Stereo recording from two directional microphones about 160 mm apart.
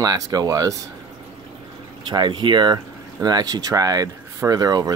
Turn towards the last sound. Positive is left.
turn(degrees=-25)  # may be behind; listen again after turning